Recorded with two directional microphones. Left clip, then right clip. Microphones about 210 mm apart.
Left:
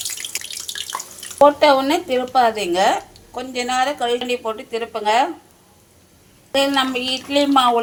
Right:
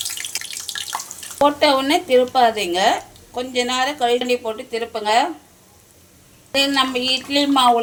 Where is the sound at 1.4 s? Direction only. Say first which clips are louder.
Left 2 dB; 10° left (ahead or behind).